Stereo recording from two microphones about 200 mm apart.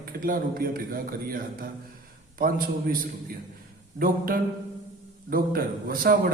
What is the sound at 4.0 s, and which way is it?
A man's voice, 45° right (ahead or behind).